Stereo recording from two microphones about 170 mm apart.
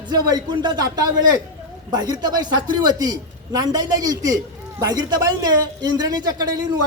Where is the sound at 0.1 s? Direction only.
25° right (ahead or behind).